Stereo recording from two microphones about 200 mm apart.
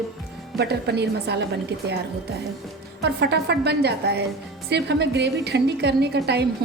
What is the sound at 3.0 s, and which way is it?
A woman's voice, 60° right (ahead or behind).